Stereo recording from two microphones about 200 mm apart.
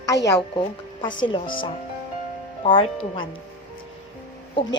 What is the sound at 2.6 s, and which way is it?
Speech, 25° left (ahead or behind).